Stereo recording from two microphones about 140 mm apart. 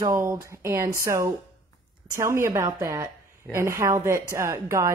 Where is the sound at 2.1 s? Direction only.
20° right (ahead or behind).